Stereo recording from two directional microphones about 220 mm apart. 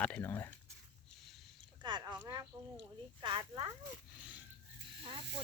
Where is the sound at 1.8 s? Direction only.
20° right (ahead or behind).